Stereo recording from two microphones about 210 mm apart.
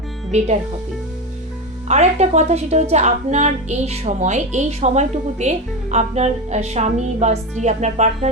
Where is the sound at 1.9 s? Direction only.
35° right (ahead or behind).